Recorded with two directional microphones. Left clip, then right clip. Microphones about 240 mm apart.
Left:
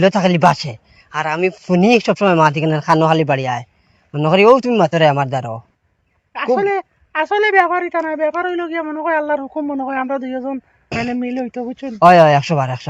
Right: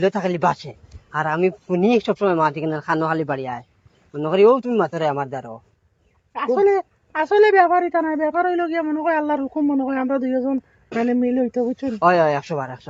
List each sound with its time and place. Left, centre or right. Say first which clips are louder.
0.0 s speech: left 7 dB; left
6.6 s speech: right 1 dB; left
11.9 s speech: left 8 dB; left